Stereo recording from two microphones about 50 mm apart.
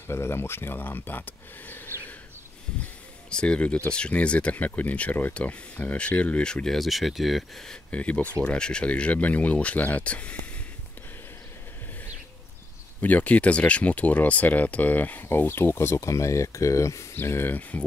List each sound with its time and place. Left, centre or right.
0.1 s speech: left
3.3 s speech: left
6.4 s speech: centre
6.8 s speech: centre
7.9 s speech: left
13.0 s speech: left
15.2 s speech: left
17.1 s speech: left
17.6 s speech: left